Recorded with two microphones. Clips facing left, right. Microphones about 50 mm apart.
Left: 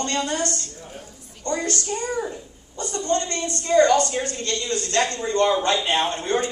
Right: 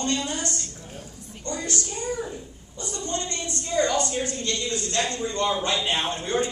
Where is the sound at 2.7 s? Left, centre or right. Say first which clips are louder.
Left 7 dB; left.